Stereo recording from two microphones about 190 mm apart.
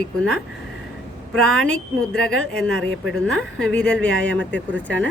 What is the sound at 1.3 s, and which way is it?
Speech, 90° right.